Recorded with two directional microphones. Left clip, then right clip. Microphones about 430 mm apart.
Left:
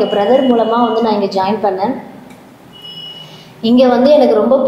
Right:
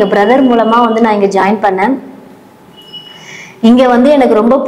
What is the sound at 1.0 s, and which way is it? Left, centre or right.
Speech, right.